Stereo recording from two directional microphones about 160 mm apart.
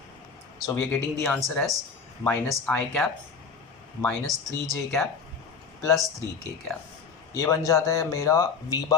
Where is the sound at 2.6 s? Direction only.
5° left (ahead or behind).